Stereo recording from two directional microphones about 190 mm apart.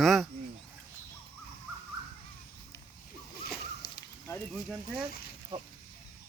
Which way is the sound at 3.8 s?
60° left (ahead or behind).